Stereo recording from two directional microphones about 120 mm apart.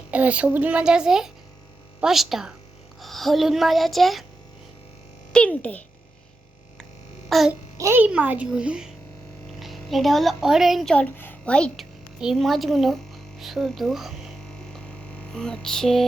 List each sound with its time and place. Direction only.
0.1 s a woman's voice: 10° right (ahead or behind)
5.3 s a child's voice: 10° left (ahead or behind)
7.3 s a child's voice: centre (ahead or behind)
7.8 s a child's voice: 25° right (ahead or behind)
8.0 s a woman's voice: 15° right (ahead or behind)
10.9 s a child's voice: 15° left (ahead or behind)
15.3 s a woman's voice: 5° left (ahead or behind)